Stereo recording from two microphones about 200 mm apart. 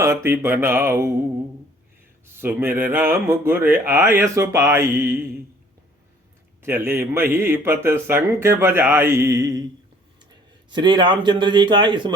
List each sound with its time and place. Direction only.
0.0 s a man's voice: 15° right (ahead or behind)
2.2 s a man's voice: 10° right (ahead or behind)
6.6 s a man's voice: 10° right (ahead or behind)
10.7 s a man's voice: 20° right (ahead or behind)